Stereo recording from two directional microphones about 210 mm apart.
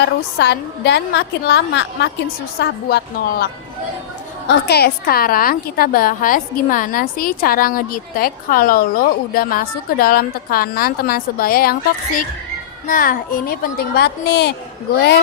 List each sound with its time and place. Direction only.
0.0 s a woman's voice: 55° left (ahead or behind)